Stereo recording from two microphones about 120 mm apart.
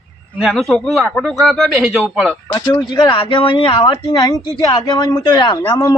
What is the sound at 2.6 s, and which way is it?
Speech, 40° left (ahead or behind).